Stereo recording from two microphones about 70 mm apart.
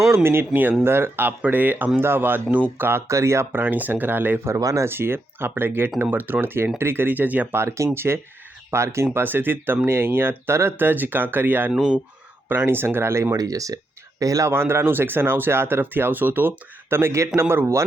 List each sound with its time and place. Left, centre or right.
0.1 s speech: right
3.1 s speech: right
4.6 s speech: right
4.9 s speech: right
7.6 s speech: right
9.1 s speech: right
11.7 s speech: centre
12.5 s speech: right
13.3 s speech: right
14.5 s speech: right